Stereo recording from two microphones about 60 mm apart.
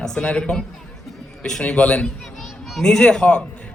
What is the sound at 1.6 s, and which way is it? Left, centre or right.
A man's voice, centre.